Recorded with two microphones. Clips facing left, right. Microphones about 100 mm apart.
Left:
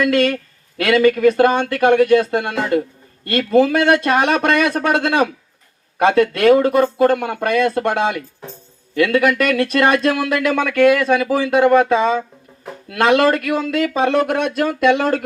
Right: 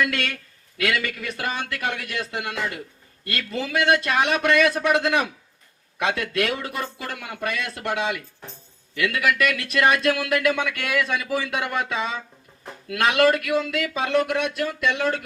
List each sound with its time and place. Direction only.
0.0 s speech: 35° left (ahead or behind)
0.9 s speech: 45° left (ahead or behind)
6.0 s speech: 40° left (ahead or behind)
10.6 s speech: 45° left (ahead or behind)